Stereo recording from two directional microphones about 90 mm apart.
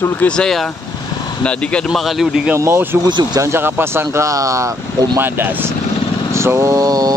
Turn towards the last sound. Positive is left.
turn(degrees=-45)  # may be behind; listen again after turning